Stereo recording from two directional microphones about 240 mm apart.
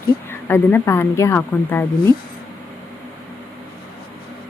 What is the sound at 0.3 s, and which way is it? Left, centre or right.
Speech, centre.